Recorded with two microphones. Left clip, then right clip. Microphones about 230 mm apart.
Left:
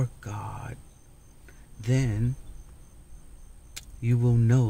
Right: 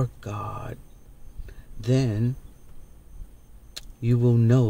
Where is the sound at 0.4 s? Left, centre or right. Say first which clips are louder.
Right 5 dB; left.